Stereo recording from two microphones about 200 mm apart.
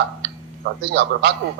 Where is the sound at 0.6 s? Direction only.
55° right (ahead or behind).